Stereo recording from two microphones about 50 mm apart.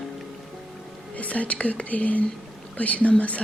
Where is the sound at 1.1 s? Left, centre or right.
Left.